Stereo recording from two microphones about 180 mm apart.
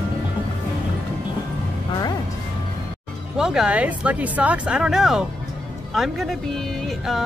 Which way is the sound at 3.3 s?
5° right (ahead or behind).